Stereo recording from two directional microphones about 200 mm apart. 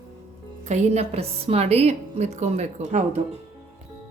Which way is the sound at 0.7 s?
30° right (ahead or behind).